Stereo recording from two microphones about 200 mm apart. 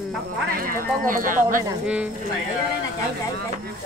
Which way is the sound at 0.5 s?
45° right (ahead or behind).